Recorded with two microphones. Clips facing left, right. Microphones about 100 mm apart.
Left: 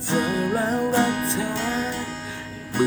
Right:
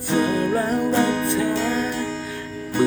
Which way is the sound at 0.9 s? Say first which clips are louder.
Right 2 dB; 5° left (ahead or behind).